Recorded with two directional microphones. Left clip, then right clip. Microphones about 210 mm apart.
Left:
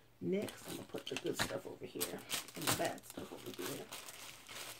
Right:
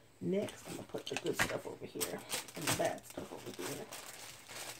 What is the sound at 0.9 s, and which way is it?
Speech, centre (ahead or behind).